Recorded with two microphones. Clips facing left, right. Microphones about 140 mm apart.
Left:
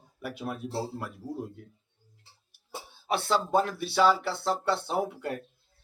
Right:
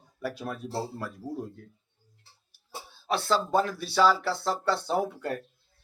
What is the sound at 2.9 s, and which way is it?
Speech, 20° left (ahead or behind).